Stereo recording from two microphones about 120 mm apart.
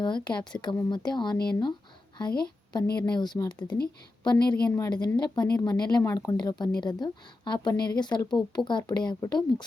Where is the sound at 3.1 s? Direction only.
35° left (ahead or behind).